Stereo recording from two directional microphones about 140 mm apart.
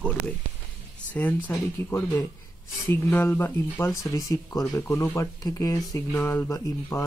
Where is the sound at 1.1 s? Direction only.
10° left (ahead or behind).